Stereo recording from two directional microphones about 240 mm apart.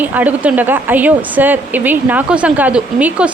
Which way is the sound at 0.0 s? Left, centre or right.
Centre.